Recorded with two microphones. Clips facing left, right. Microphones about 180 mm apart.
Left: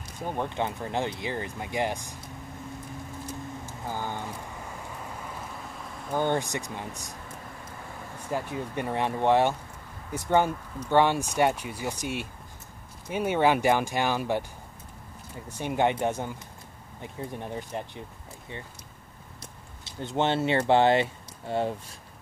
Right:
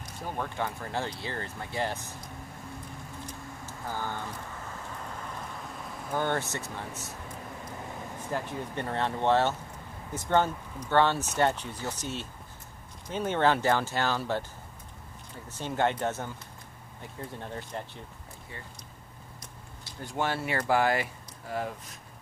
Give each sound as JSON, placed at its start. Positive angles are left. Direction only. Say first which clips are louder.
{"t": 0.3, "sound": "speech", "louder": "left 3 dB", "side_deg": 20}
{"t": 3.8, "sound": "speech", "louder": "left 1 dB", "side_deg": 15}
{"t": 6.1, "sound": "speech", "louder": "left 3 dB", "side_deg": 15}
{"t": 8.3, "sound": "speech", "louder": "left 3 dB", "side_deg": 10}
{"t": 15.4, "sound": "speech", "louder": "left 3 dB", "side_deg": 15}
{"t": 19.4, "sound": "speech", "louder": "left 1 dB", "side_deg": 25}